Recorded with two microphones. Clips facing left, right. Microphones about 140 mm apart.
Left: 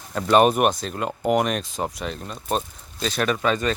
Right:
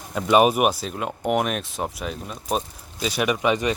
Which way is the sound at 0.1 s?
5° right (ahead or behind).